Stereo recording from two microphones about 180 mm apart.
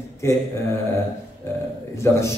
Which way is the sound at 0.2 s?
15° left (ahead or behind).